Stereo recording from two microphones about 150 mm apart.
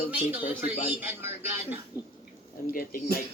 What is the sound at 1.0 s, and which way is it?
Speech, 10° right (ahead or behind).